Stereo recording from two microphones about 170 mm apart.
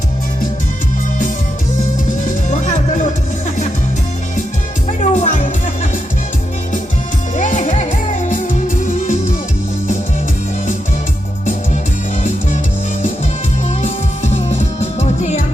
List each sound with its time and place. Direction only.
2.2 s music: 45° left (ahead or behind)
4.9 s music: 45° left (ahead or behind)
7.3 s music: 45° left (ahead or behind)
14.3 s music: 40° left (ahead or behind)